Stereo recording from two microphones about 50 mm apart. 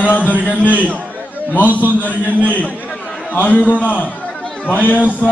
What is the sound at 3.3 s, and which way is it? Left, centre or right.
A man's voice, left.